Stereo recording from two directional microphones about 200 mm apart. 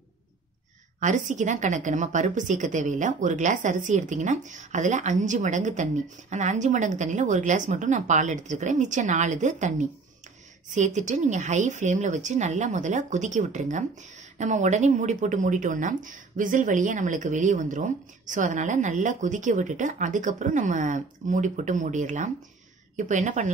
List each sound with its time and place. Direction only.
0.9 s a woman's voice: 35° right (ahead or behind)